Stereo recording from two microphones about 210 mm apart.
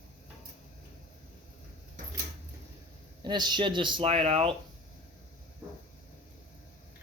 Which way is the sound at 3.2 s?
20° right (ahead or behind).